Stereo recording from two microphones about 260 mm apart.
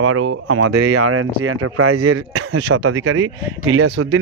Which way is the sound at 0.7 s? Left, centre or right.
Right.